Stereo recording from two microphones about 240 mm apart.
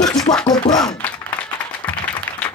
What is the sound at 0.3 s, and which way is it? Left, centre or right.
Music, left.